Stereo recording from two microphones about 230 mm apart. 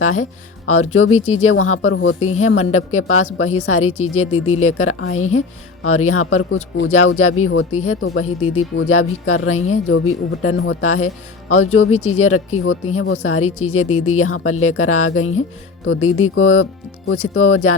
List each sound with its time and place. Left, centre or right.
0.0 s speech: left